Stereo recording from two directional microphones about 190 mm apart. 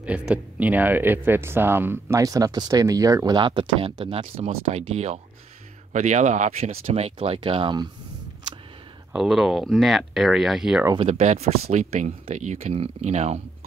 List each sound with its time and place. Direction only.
0.0 s speech: 5° right (ahead or behind); by 7.9 s 25° right (ahead or behind)
9.1 s speech: centre (ahead or behind)
11.0 s speech: 35° right (ahead or behind)